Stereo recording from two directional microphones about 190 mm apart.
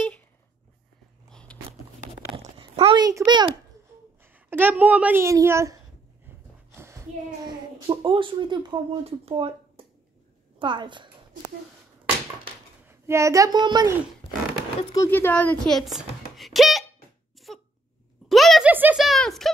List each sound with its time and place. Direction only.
1.3 s dog: 5° left (ahead or behind)
2.4 s a sound: 30° right (ahead or behind)
4.2 s a woman's voice: 10° right (ahead or behind)
6.2 s a sound: 15° right (ahead or behind)
7.8 s speech: 25° right (ahead or behind)
12.8 s speech: 15° right (ahead or behind)
14.8 s speech: 20° left (ahead or behind)
15.0 s speech: 10° left (ahead or behind)
17.5 s a sound: centre (ahead or behind)